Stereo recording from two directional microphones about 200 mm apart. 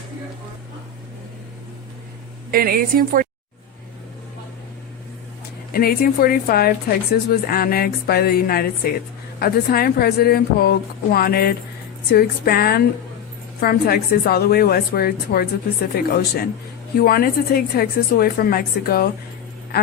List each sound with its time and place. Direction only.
2.5 s a woman's voice: 50° right (ahead or behind)
5.7 s a woman's voice: 50° left (ahead or behind)